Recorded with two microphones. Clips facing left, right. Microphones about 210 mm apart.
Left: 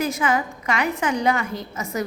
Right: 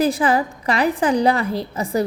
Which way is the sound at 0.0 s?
35° right (ahead or behind).